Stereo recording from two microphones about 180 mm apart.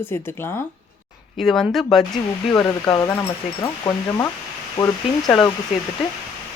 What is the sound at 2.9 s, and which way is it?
Speech, 15° left (ahead or behind).